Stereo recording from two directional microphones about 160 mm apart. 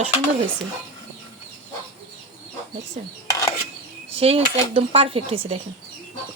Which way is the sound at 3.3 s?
20° left (ahead or behind).